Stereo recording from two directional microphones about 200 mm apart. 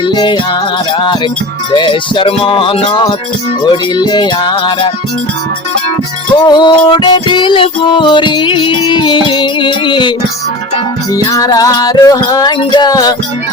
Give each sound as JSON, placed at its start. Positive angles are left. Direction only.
{"t": 0.0, "sound": "music", "side_deg": 25}
{"t": 1.7, "sound": "music", "side_deg": 25}
{"t": 6.3, "sound": "music", "side_deg": 20}